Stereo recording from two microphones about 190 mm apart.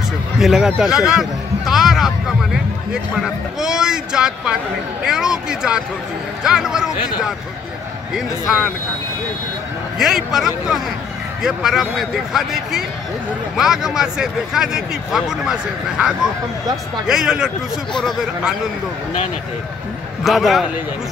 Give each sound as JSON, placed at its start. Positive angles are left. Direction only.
{"t": 0.4, "sound": "a man's voice", "side_deg": 0}
{"t": 8.1, "sound": "a man's voice", "side_deg": 0}
{"t": 9.9, "sound": "a man's voice", "side_deg": 0}
{"t": 20.2, "sound": "a man's voice", "side_deg": 0}